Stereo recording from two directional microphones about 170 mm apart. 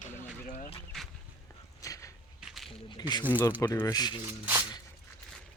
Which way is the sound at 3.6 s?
20° left (ahead or behind).